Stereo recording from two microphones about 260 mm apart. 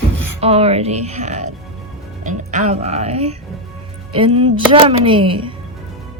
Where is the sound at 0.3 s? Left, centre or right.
Right.